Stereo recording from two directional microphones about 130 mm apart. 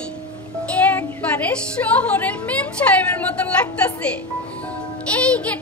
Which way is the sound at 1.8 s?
15° left (ahead or behind).